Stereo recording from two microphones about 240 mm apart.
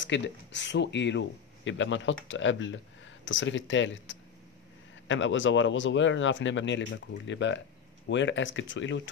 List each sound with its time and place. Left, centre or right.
0.0 s speech: left